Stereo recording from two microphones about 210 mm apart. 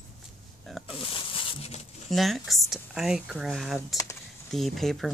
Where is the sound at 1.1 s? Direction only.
25° left (ahead or behind).